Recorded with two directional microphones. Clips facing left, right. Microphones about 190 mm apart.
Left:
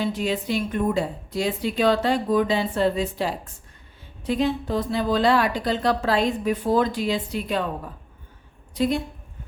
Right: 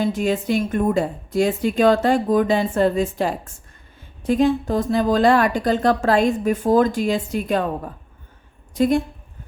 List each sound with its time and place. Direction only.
0.0 s speech: 50° right (ahead or behind)
8.7 s speech: 50° right (ahead or behind)